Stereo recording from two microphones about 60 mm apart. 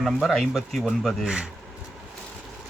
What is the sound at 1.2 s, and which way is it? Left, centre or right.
Speech, centre.